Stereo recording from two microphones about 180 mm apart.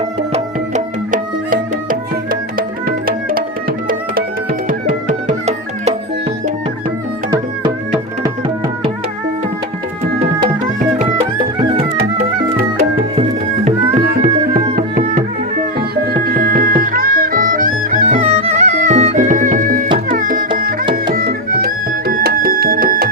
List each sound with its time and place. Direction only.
0.7 s music: 45° right (ahead or behind)
14.0 s music: 55° right (ahead or behind)